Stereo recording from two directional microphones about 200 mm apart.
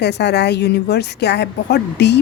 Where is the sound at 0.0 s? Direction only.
55° left (ahead or behind).